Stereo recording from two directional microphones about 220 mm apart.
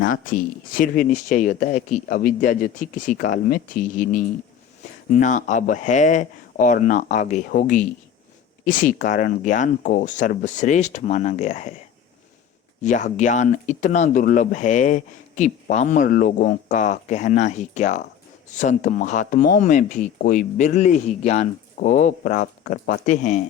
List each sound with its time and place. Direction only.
0.0 s speech: 40° left (ahead or behind)
12.8 s speech: 35° left (ahead or behind)